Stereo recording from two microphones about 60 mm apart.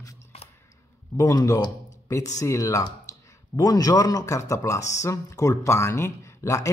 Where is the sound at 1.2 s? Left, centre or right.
Left.